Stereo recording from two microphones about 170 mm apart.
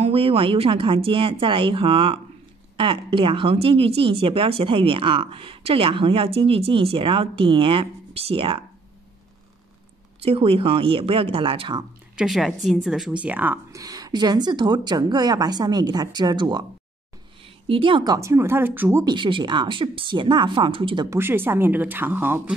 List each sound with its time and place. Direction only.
0.0 s speech: 35° right (ahead or behind)
10.2 s speech: 35° right (ahead or behind)
12.2 s speech: centre (ahead or behind)
19.0 s speech: 30° right (ahead or behind)
21.2 s speech: 15° right (ahead or behind)